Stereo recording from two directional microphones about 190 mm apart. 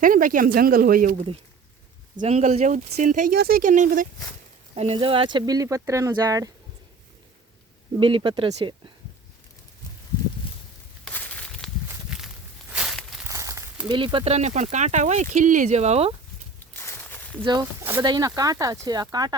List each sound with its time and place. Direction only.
0.0 s speech: 45° right (ahead or behind)
2.1 s speech: 35° right (ahead or behind)
4.7 s speech: 30° right (ahead or behind)
7.9 s speech: 25° right (ahead or behind)
11.0 s a sound: 10° left (ahead or behind)
11.9 s walk: 5° right (ahead or behind)
12.7 s a sound: centre (ahead or behind)
13.2 s crumpling: 15° right (ahead or behind)
13.8 s speech: 25° right (ahead or behind)
16.7 s a sound: 10° left (ahead or behind)
17.4 s speech: 20° right (ahead or behind)